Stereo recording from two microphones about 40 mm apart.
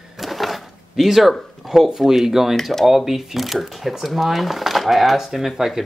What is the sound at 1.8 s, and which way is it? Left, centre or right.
Speech, centre.